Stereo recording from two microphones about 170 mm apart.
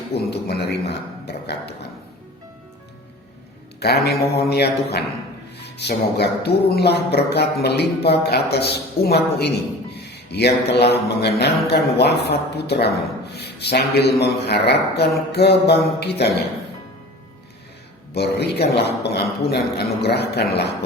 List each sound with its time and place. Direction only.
0.1 s music: 75° left (ahead or behind)
3.8 s music: 70° left (ahead or behind)
18.1 s music: 75° left (ahead or behind)